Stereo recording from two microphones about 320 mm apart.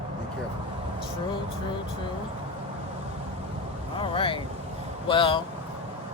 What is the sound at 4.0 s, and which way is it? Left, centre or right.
Speech, centre.